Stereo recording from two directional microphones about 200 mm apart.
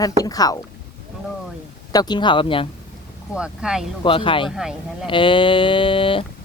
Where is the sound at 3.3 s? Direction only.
5° right (ahead or behind).